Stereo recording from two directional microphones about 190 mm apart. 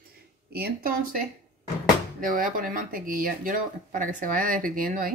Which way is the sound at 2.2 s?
45° right (ahead or behind).